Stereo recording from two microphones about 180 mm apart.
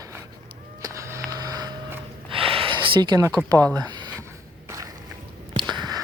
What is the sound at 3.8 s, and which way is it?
Speech, 25° right (ahead or behind).